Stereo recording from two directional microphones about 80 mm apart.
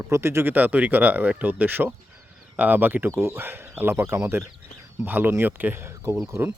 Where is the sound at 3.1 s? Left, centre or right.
Right.